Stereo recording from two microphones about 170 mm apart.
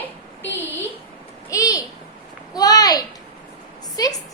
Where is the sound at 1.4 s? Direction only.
20° left (ahead or behind).